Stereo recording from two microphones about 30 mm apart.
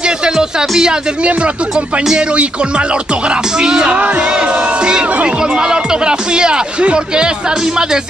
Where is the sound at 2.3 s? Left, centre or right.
Right.